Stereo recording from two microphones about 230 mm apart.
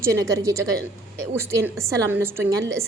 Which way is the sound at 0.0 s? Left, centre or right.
Centre.